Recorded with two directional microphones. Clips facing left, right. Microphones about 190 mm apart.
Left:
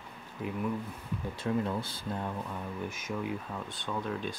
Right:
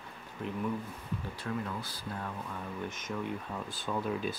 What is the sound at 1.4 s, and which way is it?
Speech, 25° left (ahead or behind).